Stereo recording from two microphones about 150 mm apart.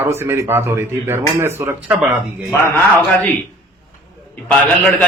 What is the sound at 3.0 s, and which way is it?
Speech, 10° left (ahead or behind).